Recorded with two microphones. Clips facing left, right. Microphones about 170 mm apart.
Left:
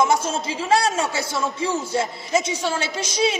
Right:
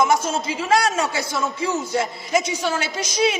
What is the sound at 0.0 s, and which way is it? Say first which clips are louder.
A woman's voice: right 1 dB; 30° left (ahead or behind).